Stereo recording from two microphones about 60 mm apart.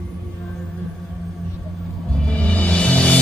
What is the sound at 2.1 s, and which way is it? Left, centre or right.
Music, centre.